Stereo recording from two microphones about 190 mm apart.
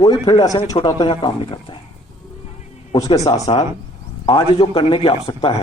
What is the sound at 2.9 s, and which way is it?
A man's voice, 20° left (ahead or behind).